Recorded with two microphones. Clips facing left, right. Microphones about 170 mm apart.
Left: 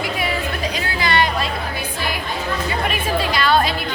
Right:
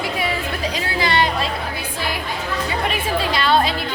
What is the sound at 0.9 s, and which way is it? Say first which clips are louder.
Chatter: even; 30° right (ahead or behind).